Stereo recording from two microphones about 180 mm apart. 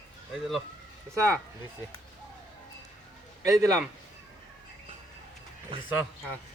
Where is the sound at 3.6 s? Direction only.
20° right (ahead or behind).